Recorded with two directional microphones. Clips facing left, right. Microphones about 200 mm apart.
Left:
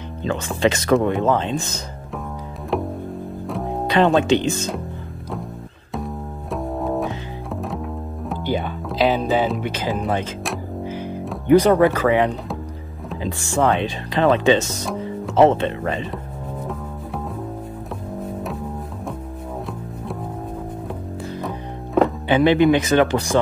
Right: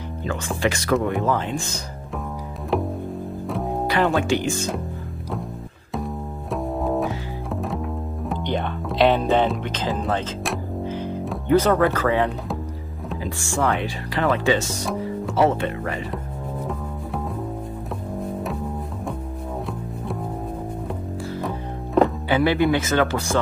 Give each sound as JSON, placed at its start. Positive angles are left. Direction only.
{"t": 0.6, "sound": "speech", "side_deg": 20}
{"t": 2.7, "sound": "music", "side_deg": 0}
{"t": 3.8, "sound": "speech", "side_deg": 20}
{"t": 5.9, "sound": "double bass", "side_deg": 0}
{"t": 8.3, "sound": "speech", "side_deg": 5}
{"t": 10.9, "sound": "music", "side_deg": 10}
{"t": 11.4, "sound": "speech", "side_deg": 15}
{"t": 21.4, "sound": "music", "side_deg": 0}
{"t": 22.3, "sound": "speech", "side_deg": 20}